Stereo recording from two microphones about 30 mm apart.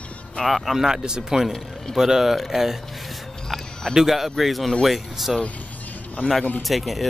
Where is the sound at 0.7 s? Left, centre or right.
Right.